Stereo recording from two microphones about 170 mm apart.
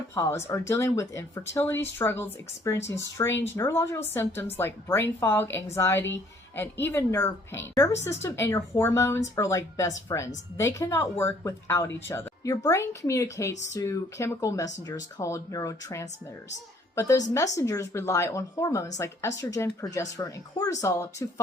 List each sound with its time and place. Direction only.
0.1 s a woman's voice: 15° left (ahead or behind)